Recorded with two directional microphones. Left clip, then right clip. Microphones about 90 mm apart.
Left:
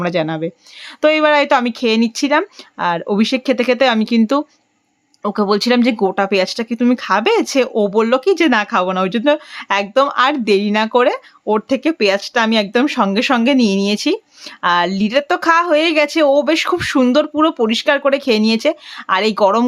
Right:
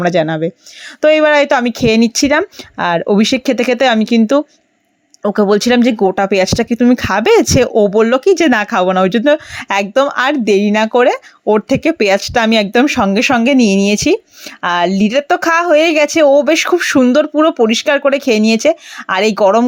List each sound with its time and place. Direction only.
0.0 s speech: 35° right (ahead or behind)
1.7 s speech: 50° right (ahead or behind); by 4.2 s 30° right (ahead or behind)
5.2 s speech: 35° right (ahead or behind)
6.9 s speech: 50° right (ahead or behind)
9.9 s speech: 35° right (ahead or behind)